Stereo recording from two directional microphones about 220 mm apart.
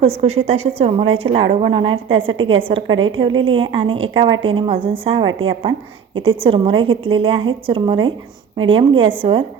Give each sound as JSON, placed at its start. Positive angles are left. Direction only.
{"t": 0.0, "sound": "a woman's voice", "side_deg": -25}